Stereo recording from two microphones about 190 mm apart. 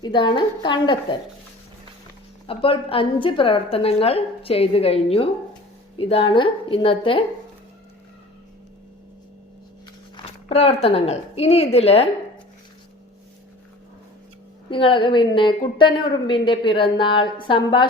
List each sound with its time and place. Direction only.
0.0 s a woman's voice: 25° left (ahead or behind)
2.5 s a woman's voice: 30° left (ahead or behind)
10.2 s a woman's voice: 30° left (ahead or behind)
14.7 s a woman's voice: 25° left (ahead or behind)